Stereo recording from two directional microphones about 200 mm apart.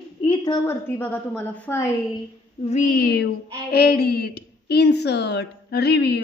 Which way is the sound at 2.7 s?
40° left (ahead or behind).